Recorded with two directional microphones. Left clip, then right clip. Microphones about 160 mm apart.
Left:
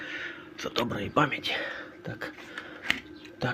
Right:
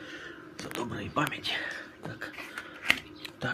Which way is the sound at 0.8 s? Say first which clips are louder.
Left 5 dB; 40° left (ahead or behind).